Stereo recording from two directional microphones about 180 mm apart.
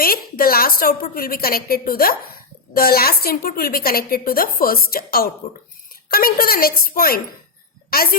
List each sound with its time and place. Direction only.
0.0 s a woman's voice: 55° left (ahead or behind)